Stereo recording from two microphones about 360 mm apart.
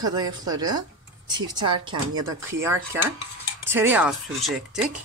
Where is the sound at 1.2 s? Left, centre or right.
Centre.